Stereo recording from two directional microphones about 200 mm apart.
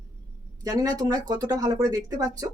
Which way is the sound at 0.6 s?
15° right (ahead or behind).